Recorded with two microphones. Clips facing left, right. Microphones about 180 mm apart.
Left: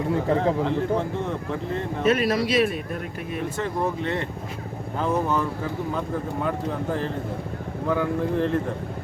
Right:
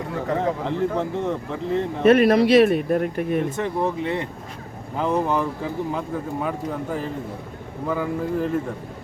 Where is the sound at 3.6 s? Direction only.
15° right (ahead or behind).